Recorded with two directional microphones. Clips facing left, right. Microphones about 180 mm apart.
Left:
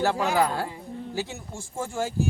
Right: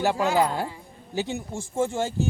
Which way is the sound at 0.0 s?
15° right (ahead or behind).